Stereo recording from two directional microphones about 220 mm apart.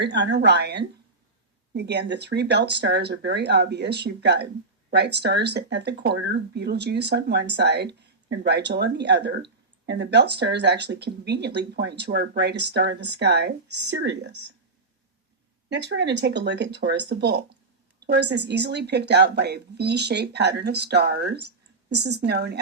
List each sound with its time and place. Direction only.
0.0 s speech: 50° right (ahead or behind)
15.7 s speech: 50° right (ahead or behind)